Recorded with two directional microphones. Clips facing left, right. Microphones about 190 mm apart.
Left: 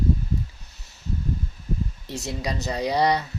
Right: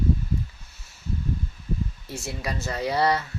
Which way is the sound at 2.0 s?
20° left (ahead or behind).